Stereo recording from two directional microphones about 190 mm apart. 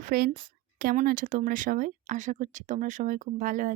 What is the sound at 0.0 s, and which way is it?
A woman's voice, 50° right (ahead or behind).